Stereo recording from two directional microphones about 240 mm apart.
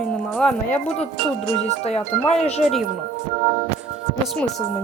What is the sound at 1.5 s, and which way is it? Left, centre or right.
Speech, left.